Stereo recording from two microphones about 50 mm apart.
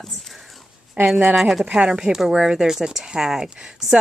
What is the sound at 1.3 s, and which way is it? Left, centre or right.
Speech, centre.